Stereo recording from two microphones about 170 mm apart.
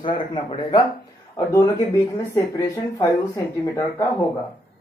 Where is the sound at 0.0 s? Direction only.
30° left (ahead or behind).